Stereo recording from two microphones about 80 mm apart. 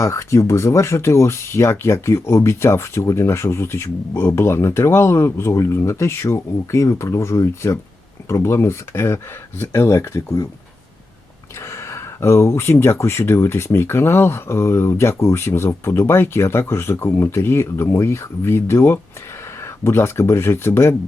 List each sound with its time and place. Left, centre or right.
0.0 s speech: left
11.6 s speech: left